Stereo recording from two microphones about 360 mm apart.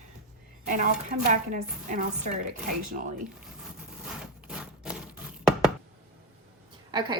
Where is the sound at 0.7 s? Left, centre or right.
Right.